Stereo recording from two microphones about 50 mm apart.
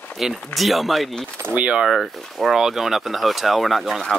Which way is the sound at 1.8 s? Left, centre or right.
Centre.